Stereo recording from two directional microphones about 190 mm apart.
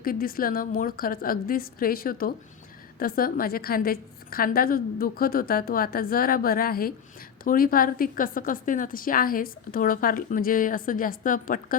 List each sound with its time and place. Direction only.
0.0 s a woman's voice: 50° left (ahead or behind)